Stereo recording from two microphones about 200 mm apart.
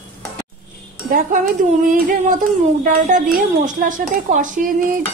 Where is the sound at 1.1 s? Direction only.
40° right (ahead or behind).